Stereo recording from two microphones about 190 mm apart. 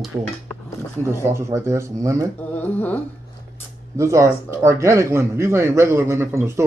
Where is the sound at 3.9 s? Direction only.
15° right (ahead or behind).